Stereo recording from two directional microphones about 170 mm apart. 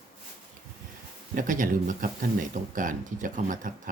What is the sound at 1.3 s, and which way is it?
Speech, 50° right (ahead or behind).